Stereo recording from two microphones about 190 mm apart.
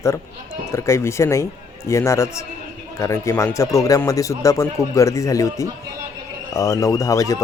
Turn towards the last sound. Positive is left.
turn(degrees=15)  # may be behind; listen again after turning